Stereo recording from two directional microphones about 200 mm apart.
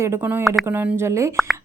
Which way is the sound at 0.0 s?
10° right (ahead or behind).